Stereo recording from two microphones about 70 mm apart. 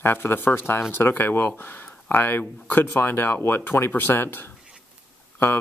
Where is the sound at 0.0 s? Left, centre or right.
Left.